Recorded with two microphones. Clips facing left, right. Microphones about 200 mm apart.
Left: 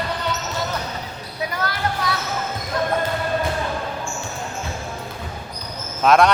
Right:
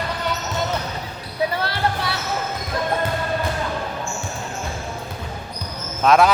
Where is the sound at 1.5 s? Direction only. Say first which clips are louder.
Right 2 dB; 30° right (ahead or behind).